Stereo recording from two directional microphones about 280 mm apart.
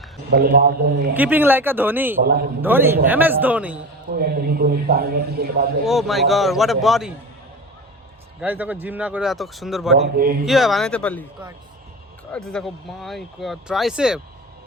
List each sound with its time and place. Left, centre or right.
0.3 s a man's voice: right
1.1 s speech: centre
2.2 s a man's voice: right
2.6 s speech: centre
4.1 s a man's voice: right
5.8 s speech: centre
8.4 s speech: centre
9.9 s a man's voice: right
10.4 s speech: centre